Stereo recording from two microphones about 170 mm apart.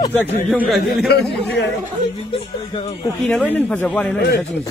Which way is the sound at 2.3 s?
35° left (ahead or behind).